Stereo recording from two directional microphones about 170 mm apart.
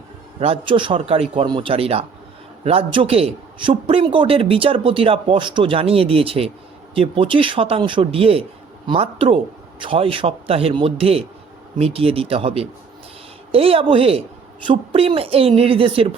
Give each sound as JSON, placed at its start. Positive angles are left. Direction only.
{"t": 0.3, "sound": "a man's voice", "side_deg": -35}